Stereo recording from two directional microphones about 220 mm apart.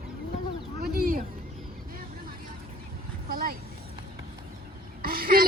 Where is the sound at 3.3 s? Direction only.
40° right (ahead or behind).